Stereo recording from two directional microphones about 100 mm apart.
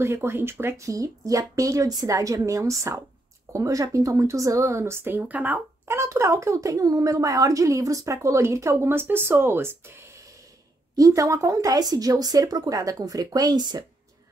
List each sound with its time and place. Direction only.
0.0 s speech: 25° right (ahead or behind)
5.9 s speech: 25° right (ahead or behind); by 13.8 s 45° right (ahead or behind)